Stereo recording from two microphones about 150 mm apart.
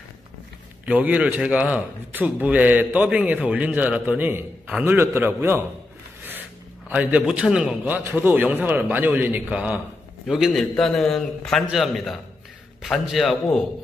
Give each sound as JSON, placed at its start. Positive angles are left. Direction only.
{"t": 0.8, "sound": "a man's voice", "side_deg": -10}
{"t": 6.9, "sound": "a man's voice", "side_deg": -10}